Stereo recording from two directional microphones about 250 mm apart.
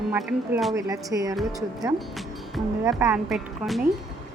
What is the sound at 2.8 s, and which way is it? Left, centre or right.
Speech, centre.